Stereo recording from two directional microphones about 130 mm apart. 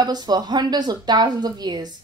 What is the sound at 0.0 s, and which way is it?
A woman's voice, 30° right (ahead or behind).